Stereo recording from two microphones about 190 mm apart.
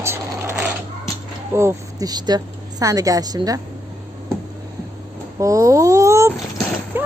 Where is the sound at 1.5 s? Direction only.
15° right (ahead or behind).